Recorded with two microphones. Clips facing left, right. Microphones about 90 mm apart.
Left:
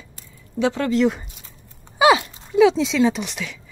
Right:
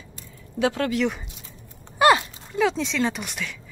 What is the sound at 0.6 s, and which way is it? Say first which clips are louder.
Speech: left 2 dB; 35° left (ahead or behind).